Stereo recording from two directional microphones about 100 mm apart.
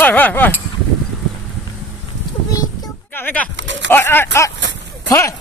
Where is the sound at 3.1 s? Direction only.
15° left (ahead or behind).